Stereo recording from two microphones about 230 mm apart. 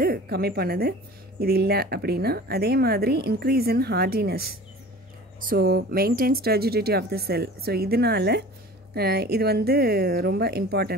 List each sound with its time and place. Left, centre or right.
0.0 s a woman's voice: right